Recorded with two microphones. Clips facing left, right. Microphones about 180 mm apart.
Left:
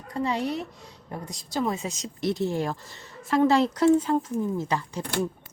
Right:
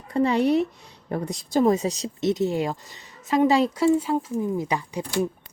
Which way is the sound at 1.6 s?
40° right (ahead or behind).